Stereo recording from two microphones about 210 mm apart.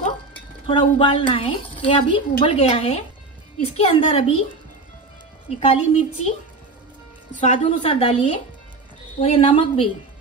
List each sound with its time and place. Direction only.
0.7 s a woman's voice: 25° left (ahead or behind)
5.6 s a woman's voice: 35° left (ahead or behind)
7.3 s a woman's voice: 35° left (ahead or behind)